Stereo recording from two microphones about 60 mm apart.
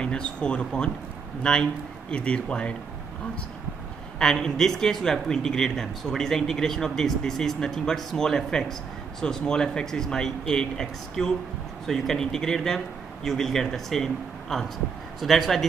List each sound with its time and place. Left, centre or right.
0.0 s speech: centre
4.2 s a man's voice: centre